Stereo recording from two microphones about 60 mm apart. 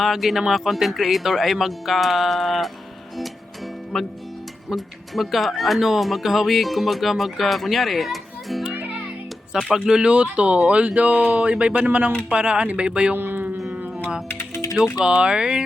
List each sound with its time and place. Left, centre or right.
0.0 s speech: centre
3.9 s speech: centre
9.7 s speech: centre
13.1 s music: right
14.3 s typing: left
15.0 s speech: centre